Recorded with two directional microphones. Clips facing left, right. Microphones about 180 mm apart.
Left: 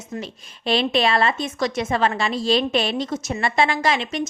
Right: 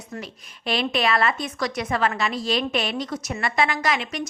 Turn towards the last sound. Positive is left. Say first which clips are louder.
# left 3 dB
turn(degrees=25)  # may be behind; listen again after turning